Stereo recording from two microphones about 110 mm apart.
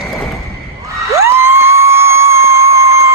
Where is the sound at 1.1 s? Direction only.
25° right (ahead or behind).